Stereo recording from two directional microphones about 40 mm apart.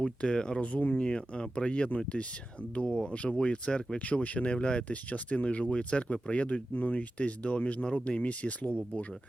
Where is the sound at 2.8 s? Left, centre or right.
Centre.